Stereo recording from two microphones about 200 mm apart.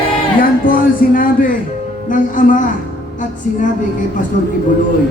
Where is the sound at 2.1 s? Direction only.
40° left (ahead or behind).